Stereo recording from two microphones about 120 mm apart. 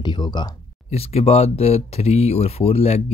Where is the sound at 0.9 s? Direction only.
60° left (ahead or behind).